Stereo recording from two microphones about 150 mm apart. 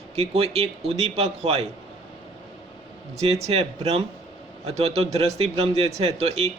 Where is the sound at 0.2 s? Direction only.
40° right (ahead or behind).